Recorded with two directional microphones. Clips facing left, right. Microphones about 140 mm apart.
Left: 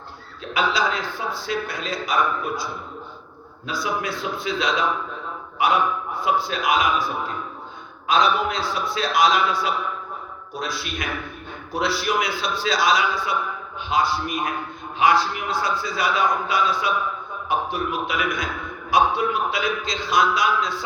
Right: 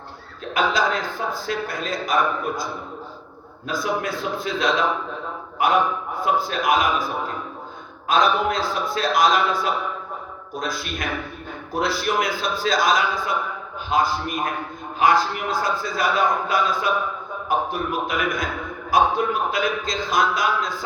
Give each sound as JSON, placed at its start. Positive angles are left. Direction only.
{"t": 0.5, "sound": "a man's voice", "side_deg": -45}
{"t": 3.7, "sound": "a man's voice", "side_deg": -45}
{"t": 8.0, "sound": "a man's voice", "side_deg": -50}